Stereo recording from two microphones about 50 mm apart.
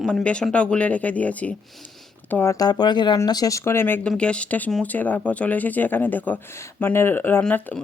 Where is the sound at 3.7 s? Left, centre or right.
Left.